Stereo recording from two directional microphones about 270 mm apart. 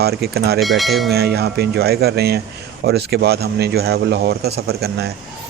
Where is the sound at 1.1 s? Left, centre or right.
Right.